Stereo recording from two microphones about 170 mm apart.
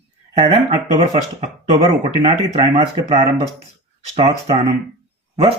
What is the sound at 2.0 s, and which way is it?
Speech, 40° right (ahead or behind).